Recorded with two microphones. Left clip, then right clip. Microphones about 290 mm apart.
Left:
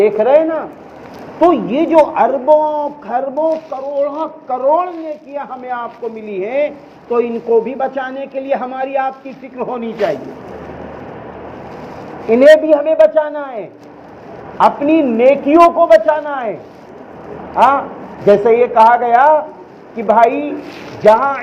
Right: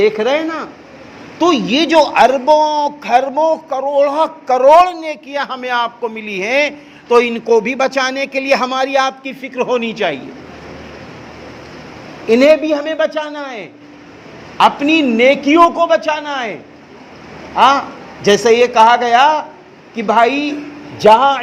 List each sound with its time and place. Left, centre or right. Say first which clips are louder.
0.0 s a man's voice: left 3 dB; right
12.3 s a man's voice: left 3 dB; right
17.5 s a man's voice: even; right